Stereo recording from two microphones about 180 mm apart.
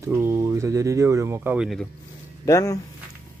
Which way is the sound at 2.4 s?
20° left (ahead or behind).